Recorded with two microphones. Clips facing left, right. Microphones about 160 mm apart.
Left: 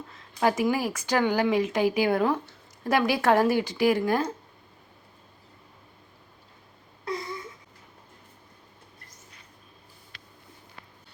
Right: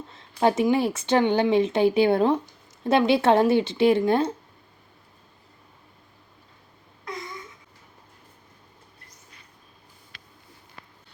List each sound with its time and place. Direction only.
0.1 s speech: 25° right (ahead or behind)